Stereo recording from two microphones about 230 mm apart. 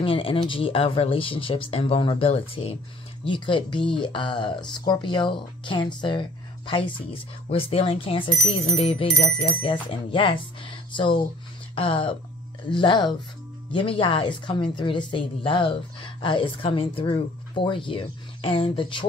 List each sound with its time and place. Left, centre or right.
0.0 s a woman's voice: left